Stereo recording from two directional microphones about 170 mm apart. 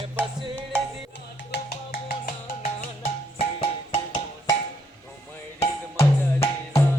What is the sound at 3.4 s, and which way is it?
Music, 30° left (ahead or behind).